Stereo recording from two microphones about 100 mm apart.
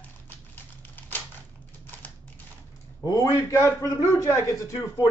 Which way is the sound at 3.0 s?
35° left (ahead or behind).